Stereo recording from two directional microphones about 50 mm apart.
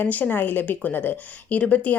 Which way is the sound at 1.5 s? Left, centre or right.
Left.